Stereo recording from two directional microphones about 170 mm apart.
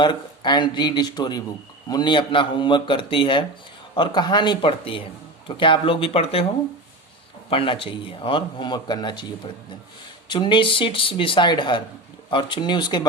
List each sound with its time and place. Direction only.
0.0 s a man's voice: 25° left (ahead or behind)
7.5 s a man's voice: 30° left (ahead or behind)
10.2 s a man's voice: 30° left (ahead or behind)